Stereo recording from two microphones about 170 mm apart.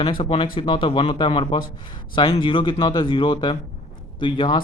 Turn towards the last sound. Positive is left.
turn(degrees=25)  # may be behind; listen again after turning